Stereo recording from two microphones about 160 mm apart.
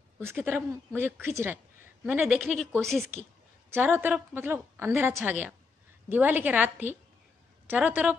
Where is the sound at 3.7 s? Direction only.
15° right (ahead or behind).